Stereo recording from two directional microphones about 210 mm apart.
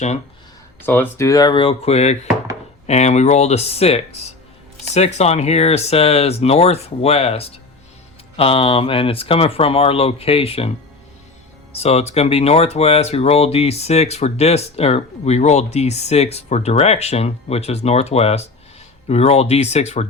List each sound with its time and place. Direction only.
0.9 s speech: 10° left (ahead or behind); by 10.7 s 25° left (ahead or behind)
11.7 s speech: 30° left (ahead or behind)